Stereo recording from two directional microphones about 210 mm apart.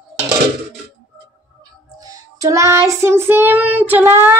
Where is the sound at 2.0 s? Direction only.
15° right (ahead or behind).